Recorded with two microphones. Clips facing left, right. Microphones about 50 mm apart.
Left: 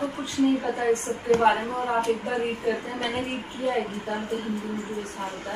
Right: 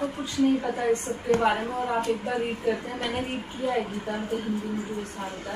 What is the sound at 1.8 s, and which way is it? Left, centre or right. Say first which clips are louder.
A woman's voice: left 2 dB; left.